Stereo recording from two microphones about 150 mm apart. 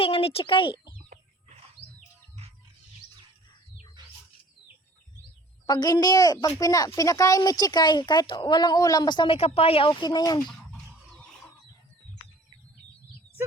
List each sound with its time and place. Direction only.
0.0 s speech: 40° left (ahead or behind)
4.0 s a sound: 30° right (ahead or behind)
5.6 s speech: 25° left (ahead or behind)